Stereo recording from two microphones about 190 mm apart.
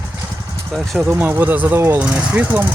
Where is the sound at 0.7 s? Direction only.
Centre (ahead or behind).